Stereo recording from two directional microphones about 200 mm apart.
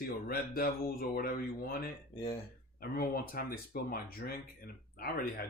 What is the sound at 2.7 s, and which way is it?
Speech, 50° left (ahead or behind).